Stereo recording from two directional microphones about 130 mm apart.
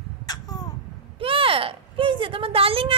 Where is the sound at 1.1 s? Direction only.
45° right (ahead or behind).